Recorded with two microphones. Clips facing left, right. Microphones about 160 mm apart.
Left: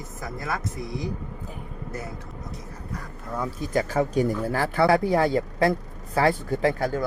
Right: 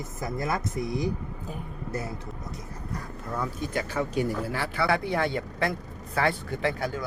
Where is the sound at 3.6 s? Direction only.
35° left (ahead or behind).